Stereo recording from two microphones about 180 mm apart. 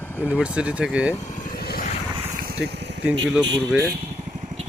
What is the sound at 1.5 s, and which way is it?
Vehicle, 55° left (ahead or behind).